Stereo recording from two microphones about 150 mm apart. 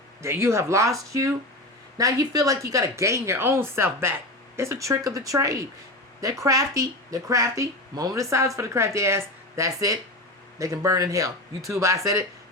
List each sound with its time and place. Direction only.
0.2 s speech: 15° right (ahead or behind)